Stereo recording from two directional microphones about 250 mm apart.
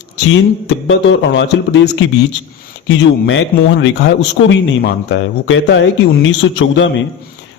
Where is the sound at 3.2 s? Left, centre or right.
Left.